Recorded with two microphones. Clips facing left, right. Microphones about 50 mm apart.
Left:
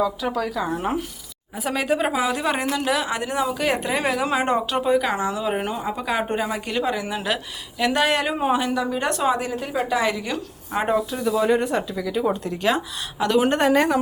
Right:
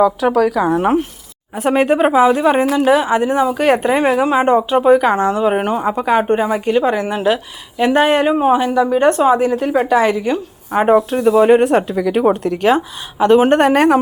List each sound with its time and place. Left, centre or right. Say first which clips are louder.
0.0 s speech: right 10 dB; right
1.7 s a woman's voice: right 9 dB; right
3.5 s a woman's voice: right 9 dB; right
3.9 s a woman's voice: right 9 dB; right
4.3 s speech: right 8 dB; centre
4.8 s a woman's voice: right 9 dB; right
6.4 s a woman's voice: right 9 dB; right
7.8 s a woman's voice: right 8 dB; right
10.3 s a woman's voice: right 9 dB; right
10.8 s a woman's voice: right 10 dB; right
11.5 s a woman's voice: right 10 dB; right
12.7 s a woman's voice: right 8 dB; right
13.6 s a woman's voice: right 7 dB; right